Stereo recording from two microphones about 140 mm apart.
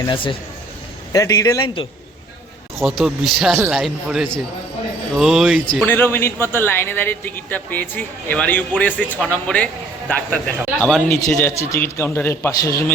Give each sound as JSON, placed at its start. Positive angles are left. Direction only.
{"t": 0.1, "sound": "a man's voice", "side_deg": 35}
{"t": 1.1, "sound": "a man's voice", "side_deg": 25}
{"t": 1.6, "sound": "a man's voice", "side_deg": 40}
{"t": 2.7, "sound": "speech", "side_deg": 0}
{"t": 5.8, "sound": "a man's voice", "side_deg": 15}